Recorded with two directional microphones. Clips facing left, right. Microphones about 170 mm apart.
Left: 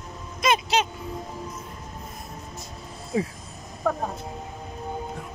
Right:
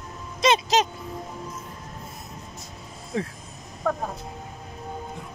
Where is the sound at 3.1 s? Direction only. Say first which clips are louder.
Left 3 dB; 5° left (ahead or behind).